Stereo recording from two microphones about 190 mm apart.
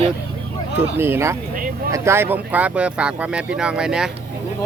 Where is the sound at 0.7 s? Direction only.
10° right (ahead or behind).